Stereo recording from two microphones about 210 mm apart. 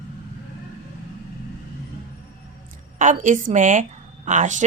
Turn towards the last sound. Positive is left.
turn(degrees=-35)  # may be behind; listen again after turning